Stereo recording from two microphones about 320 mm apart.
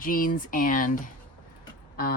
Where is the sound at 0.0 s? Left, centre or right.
Left.